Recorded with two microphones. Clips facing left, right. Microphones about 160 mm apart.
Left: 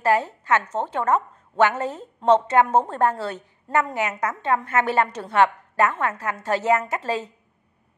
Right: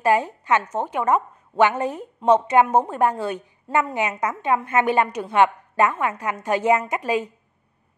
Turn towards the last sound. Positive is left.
turn(degrees=-15)  # may be behind; listen again after turning